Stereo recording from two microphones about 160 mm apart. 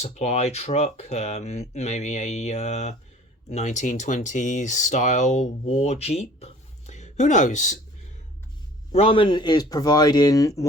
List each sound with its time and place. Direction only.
0.0 s speech: 45° left (ahead or behind)
8.9 s a man's voice: 35° left (ahead or behind); by 10.7 s 20° left (ahead or behind)